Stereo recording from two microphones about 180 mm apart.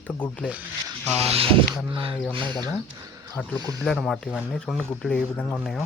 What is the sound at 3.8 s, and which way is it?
Speech, centre (ahead or behind).